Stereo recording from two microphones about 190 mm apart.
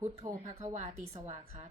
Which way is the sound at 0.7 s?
40° right (ahead or behind).